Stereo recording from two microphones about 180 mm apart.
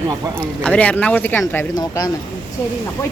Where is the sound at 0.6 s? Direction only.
5° left (ahead or behind).